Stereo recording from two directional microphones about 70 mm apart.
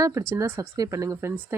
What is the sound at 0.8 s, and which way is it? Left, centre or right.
Speech, right.